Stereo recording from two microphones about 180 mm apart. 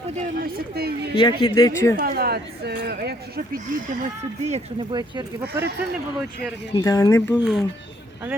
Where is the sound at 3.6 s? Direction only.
40° right (ahead or behind).